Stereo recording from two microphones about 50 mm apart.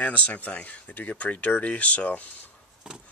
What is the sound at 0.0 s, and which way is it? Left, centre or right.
Speech, left.